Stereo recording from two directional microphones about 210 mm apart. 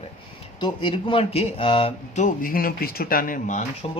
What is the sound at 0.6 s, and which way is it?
Speech, 25° left (ahead or behind).